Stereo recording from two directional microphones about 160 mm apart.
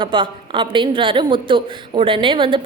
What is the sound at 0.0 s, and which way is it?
A woman's voice, 30° right (ahead or behind).